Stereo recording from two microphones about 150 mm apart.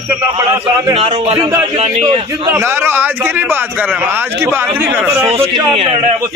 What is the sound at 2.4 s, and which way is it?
A man's voice, 15° right (ahead or behind).